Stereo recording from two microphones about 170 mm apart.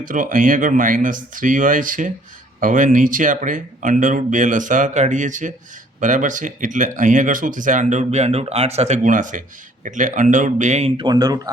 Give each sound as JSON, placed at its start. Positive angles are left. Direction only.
{"t": 0.0, "sound": "speech", "side_deg": -50}